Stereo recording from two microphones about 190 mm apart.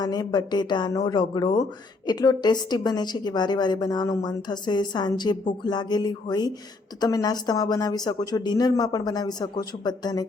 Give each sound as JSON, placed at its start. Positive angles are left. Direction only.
{"t": 0.0, "sound": "a woman's voice", "side_deg": 20}